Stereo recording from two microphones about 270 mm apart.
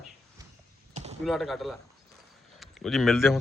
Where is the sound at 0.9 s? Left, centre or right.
Right.